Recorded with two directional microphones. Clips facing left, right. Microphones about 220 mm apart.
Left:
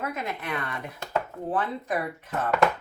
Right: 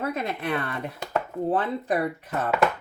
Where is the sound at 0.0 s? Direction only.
35° right (ahead or behind).